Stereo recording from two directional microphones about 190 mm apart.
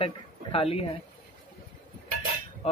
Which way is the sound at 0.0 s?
30° left (ahead or behind).